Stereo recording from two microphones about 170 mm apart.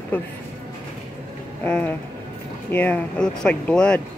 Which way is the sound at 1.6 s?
10° left (ahead or behind).